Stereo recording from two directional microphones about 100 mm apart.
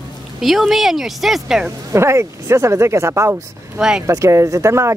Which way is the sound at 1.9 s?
25° right (ahead or behind).